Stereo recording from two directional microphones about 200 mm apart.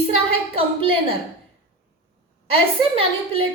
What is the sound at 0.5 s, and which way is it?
Speech, 25° right (ahead or behind).